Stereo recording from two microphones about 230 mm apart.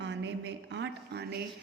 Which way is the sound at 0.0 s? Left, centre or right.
Right.